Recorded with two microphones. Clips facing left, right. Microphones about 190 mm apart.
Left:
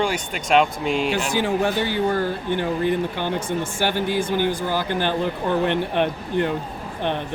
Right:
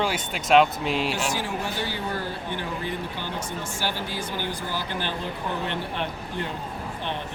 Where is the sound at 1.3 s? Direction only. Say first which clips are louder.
Left 8 dB; 60° left (ahead or behind).